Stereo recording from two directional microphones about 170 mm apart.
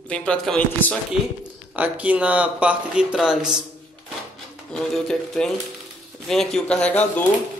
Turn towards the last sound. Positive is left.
turn(degrees=10)  # may be behind; listen again after turning